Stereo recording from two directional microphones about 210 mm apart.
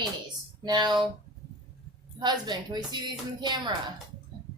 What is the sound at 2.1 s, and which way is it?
A woman's voice, 20° right (ahead or behind).